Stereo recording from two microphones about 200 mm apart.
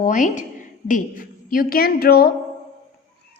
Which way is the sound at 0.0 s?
40° left (ahead or behind).